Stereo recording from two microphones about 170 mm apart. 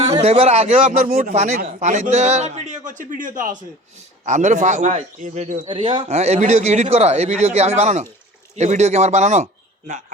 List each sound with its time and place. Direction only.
0.2 s a man's voice: 40° right (ahead or behind)
5.6 s a man's voice: 30° right (ahead or behind); by 10.0 s 45° right (ahead or behind)